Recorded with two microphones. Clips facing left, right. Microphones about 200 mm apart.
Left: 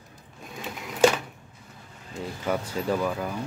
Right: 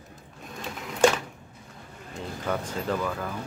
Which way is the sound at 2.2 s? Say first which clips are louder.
Left 2 dB; 10° left (ahead or behind).